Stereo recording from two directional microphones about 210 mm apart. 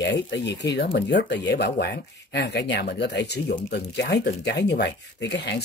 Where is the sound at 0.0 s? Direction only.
55° left (ahead or behind).